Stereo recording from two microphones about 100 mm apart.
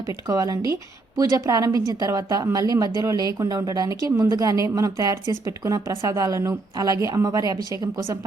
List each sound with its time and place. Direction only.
0.1 s a woman's voice: 35° right (ahead or behind)